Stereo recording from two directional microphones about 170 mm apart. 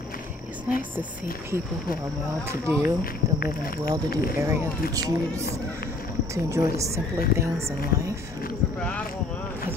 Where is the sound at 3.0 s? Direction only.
60° left (ahead or behind).